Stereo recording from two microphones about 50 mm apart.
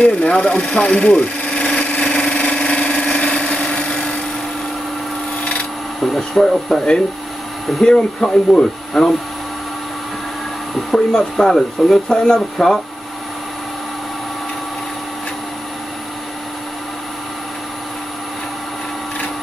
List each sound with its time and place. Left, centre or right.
0.0 s a sound: left
5.9 s speech: centre
7.8 s speech: centre
10.9 s speech: centre